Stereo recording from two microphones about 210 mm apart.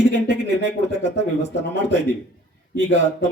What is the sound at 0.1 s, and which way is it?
A man's voice, 60° right (ahead or behind).